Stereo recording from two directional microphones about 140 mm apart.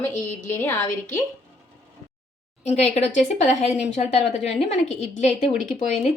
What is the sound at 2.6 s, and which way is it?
A woman's voice, 50° left (ahead or behind).